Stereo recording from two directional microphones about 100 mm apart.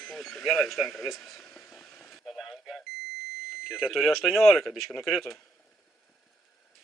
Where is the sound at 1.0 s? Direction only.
Centre (ahead or behind).